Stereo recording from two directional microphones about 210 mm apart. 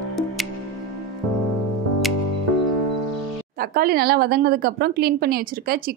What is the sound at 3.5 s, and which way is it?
A woman's voice, 45° right (ahead or behind).